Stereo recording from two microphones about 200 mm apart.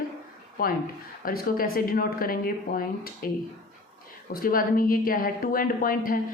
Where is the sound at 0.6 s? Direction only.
45° left (ahead or behind).